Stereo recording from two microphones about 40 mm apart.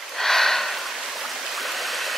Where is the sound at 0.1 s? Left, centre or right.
Centre.